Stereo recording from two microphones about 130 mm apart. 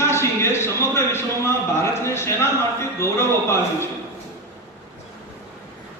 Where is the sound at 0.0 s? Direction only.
20° left (ahead or behind).